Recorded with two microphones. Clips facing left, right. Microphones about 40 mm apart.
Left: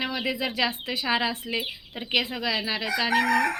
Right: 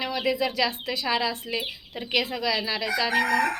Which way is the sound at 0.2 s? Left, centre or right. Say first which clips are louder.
Right 4 dB; centre.